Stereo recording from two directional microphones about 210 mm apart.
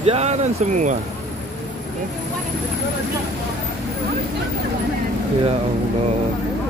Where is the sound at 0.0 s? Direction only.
30° right (ahead or behind).